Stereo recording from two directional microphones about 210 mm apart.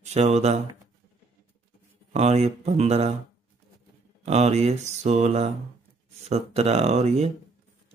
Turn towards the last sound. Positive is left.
turn(degrees=-30)  # may be behind; listen again after turning